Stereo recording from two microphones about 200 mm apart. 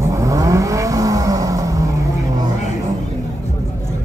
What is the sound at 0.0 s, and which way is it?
Vehicle, 15° right (ahead or behind).